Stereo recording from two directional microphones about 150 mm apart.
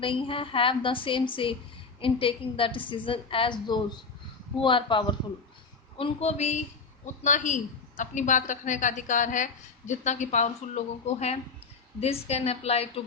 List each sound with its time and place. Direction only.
0.0 s a woman's voice: 35° left (ahead or behind)